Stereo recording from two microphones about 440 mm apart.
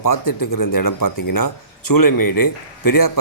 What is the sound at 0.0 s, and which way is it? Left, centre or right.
Speech, left.